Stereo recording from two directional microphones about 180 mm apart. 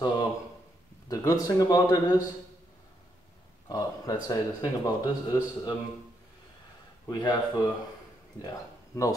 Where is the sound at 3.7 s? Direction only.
20° left (ahead or behind).